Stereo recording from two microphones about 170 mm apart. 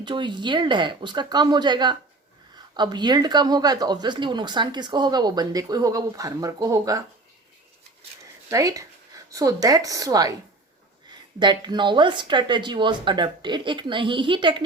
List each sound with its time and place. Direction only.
0.0 s speech: 25° right (ahead or behind)
8.4 s speech: 20° right (ahead or behind)
11.3 s speech: 25° right (ahead or behind)